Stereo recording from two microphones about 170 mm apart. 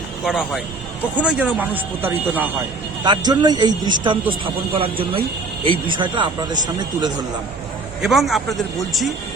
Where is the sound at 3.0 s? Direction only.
25° right (ahead or behind).